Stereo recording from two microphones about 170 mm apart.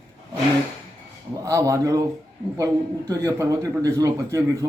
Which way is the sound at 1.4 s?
20° right (ahead or behind).